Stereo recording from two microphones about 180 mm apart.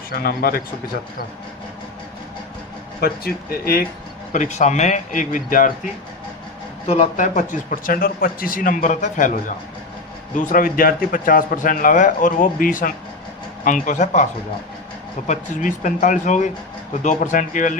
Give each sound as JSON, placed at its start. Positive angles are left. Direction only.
{"t": 0.1, "sound": "speech", "side_deg": 60}
{"t": 3.0, "sound": "speech", "side_deg": 55}
{"t": 4.3, "sound": "speech", "side_deg": 45}
{"t": 15.3, "sound": "speech", "side_deg": 45}